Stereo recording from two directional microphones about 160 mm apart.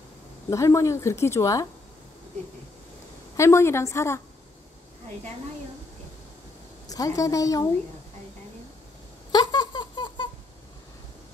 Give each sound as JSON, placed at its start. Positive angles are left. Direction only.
{"t": 0.5, "sound": "a woman's voice", "side_deg": 20}
{"t": 3.3, "sound": "a woman's voice", "side_deg": 15}
{"t": 6.9, "sound": "a woman's voice", "side_deg": 20}
{"t": 9.3, "sound": "rodents", "side_deg": 25}